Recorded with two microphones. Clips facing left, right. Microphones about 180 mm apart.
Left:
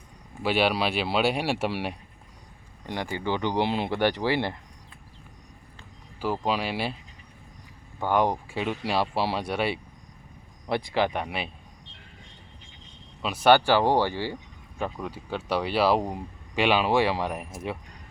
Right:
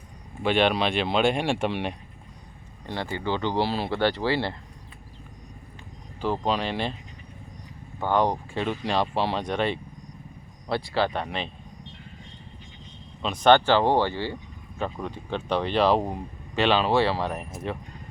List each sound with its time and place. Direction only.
0.4 s speech: 5° left (ahead or behind)
6.2 s speech: 10° left (ahead or behind)
8.0 s speech: 10° left (ahead or behind)
13.2 s speech: 10° left (ahead or behind)
14.8 s speech: centre (ahead or behind)